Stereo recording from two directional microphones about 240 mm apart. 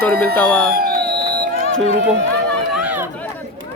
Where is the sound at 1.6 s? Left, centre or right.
Left.